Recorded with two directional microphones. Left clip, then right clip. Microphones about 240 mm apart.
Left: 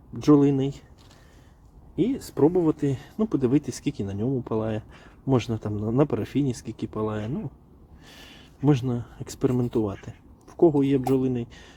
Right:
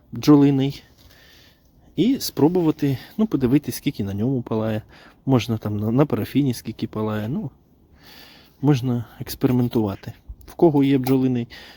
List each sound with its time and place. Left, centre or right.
0.1 s speech: right
2.0 s speech: right